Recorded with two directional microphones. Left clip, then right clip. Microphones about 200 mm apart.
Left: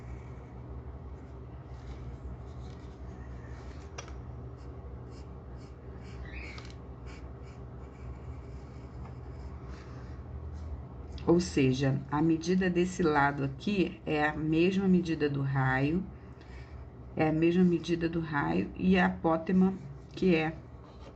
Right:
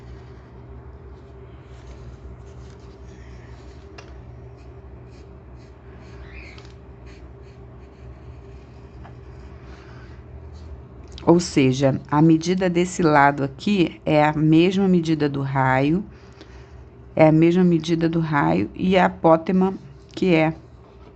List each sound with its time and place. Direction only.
11.1 s speech: 50° right (ahead or behind)
17.2 s speech: 50° right (ahead or behind)